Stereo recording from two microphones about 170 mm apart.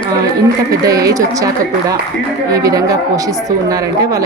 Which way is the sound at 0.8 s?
20° right (ahead or behind).